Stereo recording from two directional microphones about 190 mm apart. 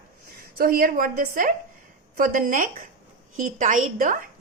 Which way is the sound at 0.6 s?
50° right (ahead or behind).